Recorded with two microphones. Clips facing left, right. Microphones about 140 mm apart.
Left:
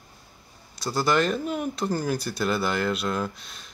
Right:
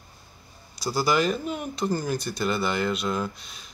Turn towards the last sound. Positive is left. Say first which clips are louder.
# even
turn(degrees=0)  # may be behind; listen again after turning